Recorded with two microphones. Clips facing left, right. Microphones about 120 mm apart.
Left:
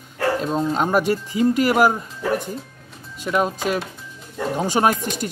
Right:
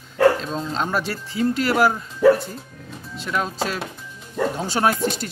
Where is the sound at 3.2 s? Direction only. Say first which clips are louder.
Left 3 dB; 10° left (ahead or behind).